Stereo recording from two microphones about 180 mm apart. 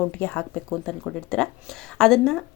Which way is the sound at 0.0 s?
10° left (ahead or behind).